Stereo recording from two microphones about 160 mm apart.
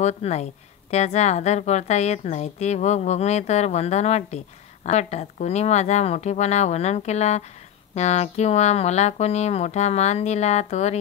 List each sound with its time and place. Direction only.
0.0 s speech: 45° left (ahead or behind)